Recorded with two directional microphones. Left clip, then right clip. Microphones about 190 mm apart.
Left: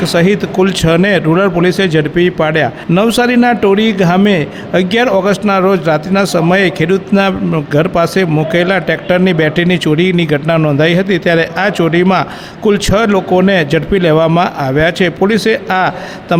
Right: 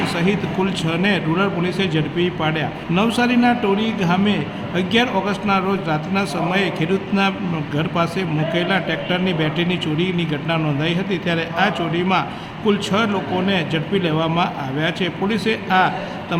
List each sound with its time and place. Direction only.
0.0 s a man's voice: 55° left (ahead or behind)